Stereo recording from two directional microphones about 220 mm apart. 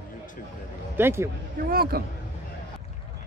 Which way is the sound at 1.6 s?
45° right (ahead or behind).